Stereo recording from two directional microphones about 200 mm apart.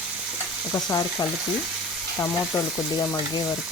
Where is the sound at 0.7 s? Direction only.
20° left (ahead or behind).